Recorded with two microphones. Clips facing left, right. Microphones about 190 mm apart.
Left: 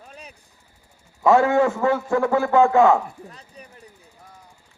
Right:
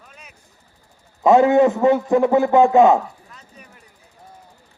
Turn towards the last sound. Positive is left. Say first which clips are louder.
# left 2 dB
turn(degrees=35)  # may be behind; listen again after turning